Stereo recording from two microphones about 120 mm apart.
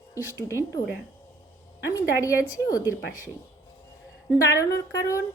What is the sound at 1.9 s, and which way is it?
A woman's voice, 25° left (ahead or behind).